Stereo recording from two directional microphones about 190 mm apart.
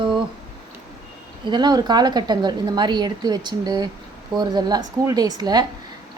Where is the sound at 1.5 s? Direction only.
20° right (ahead or behind).